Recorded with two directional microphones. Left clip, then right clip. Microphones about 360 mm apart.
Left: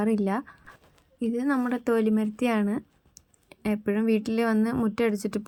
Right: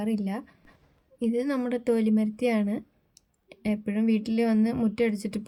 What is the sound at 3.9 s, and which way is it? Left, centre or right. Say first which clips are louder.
Speech: left 1 dB; centre.